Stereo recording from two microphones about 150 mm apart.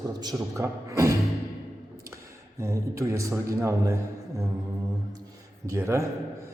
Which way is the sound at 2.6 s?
20° right (ahead or behind).